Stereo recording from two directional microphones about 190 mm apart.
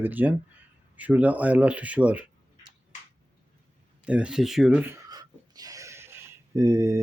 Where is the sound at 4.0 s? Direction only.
5° right (ahead or behind).